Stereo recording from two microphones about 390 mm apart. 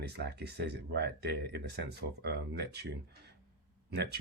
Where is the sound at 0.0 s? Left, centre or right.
Right.